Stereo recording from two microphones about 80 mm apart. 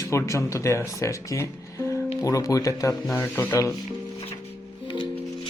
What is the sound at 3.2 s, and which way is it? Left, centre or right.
Speech, left.